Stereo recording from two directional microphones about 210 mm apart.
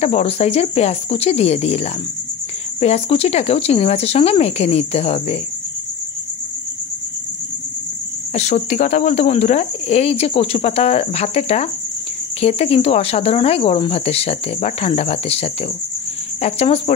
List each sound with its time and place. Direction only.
0.0 s speech: 30° left (ahead or behind)
8.4 s speech: 35° left (ahead or behind)